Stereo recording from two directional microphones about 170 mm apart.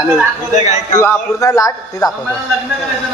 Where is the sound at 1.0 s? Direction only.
15° left (ahead or behind).